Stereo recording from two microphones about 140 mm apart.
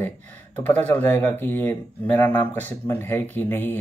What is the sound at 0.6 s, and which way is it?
Speech, 10° left (ahead or behind).